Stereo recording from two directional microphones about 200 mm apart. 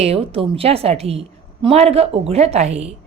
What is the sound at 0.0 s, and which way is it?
A woman's voice, 30° right (ahead or behind).